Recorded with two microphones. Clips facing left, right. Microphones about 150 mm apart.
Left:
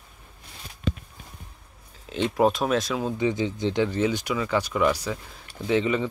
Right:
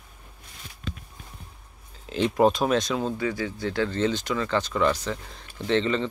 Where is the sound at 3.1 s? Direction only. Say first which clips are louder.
Left 3 dB; 20° left (ahead or behind).